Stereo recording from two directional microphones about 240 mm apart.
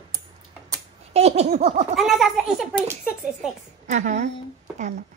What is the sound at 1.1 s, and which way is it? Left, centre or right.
Laughter, right.